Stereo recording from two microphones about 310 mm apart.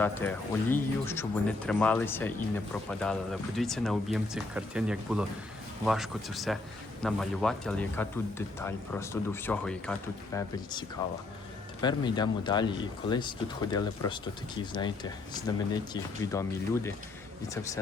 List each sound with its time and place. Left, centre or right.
0.0 s speech: centre
11.8 s speech: centre